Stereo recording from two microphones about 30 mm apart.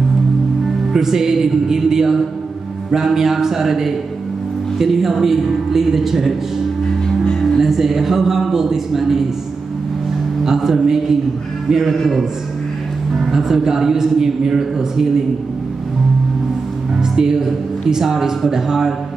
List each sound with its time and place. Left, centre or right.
0.9 s a man's voice: centre
7.6 s a man's voice: centre
10.4 s a man's voice: centre
11.7 s a man's voice: centre
13.3 s a man's voice: centre
17.0 s a man's voice: centre